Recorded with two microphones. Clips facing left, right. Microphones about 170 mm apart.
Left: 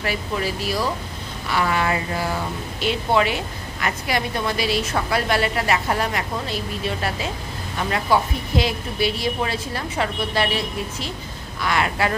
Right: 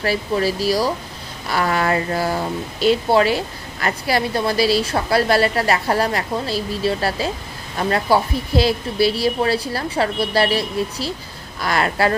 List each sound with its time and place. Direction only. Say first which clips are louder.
0.0 s a woman's voice: right 5 dB; 35° right (ahead or behind)